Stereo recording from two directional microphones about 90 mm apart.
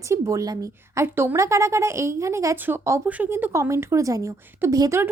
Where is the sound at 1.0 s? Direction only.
25° right (ahead or behind).